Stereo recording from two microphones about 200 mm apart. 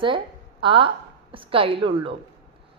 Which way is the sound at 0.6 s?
25° right (ahead or behind).